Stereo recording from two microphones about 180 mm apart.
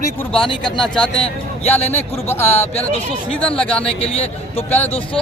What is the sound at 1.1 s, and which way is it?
Speech, 30° left (ahead or behind).